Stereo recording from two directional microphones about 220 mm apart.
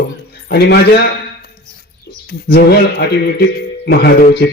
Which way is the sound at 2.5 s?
45° left (ahead or behind).